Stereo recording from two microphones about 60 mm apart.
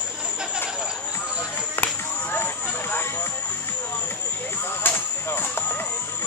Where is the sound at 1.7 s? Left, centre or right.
Left.